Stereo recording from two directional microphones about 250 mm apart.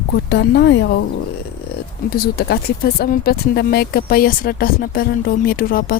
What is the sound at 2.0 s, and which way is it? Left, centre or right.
Speech, left.